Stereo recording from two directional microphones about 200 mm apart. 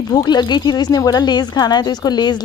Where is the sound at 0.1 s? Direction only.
20° left (ahead or behind).